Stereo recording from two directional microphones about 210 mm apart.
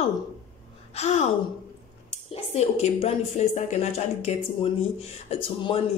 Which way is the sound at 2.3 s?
30° left (ahead or behind).